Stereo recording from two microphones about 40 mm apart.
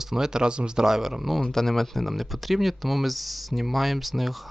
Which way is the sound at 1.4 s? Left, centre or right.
Centre.